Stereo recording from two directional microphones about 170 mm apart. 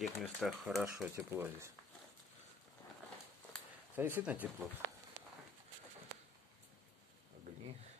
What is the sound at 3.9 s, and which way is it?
Speech, 10° right (ahead or behind).